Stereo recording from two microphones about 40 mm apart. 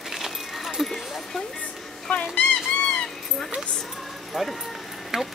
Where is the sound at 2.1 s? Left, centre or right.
Left.